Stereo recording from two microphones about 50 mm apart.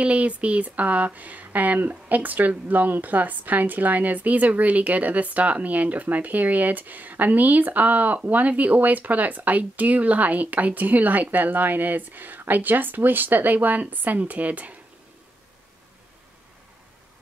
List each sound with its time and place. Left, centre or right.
0.0 s speech: right